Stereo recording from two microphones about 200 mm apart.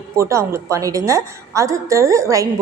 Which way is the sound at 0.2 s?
15° right (ahead or behind).